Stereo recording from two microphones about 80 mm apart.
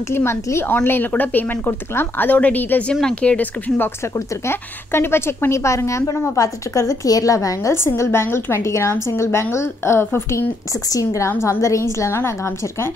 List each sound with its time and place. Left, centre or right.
0.1 s a woman's voice: left
2.9 s a woman's voice: centre; by 10.5 s left
10.9 s a woman's voice: left